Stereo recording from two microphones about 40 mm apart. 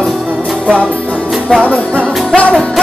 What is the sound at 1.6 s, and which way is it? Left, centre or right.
Music, left.